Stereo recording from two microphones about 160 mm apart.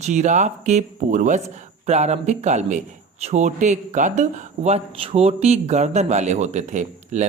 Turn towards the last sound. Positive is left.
turn(degrees=-45)  # may be behind; listen again after turning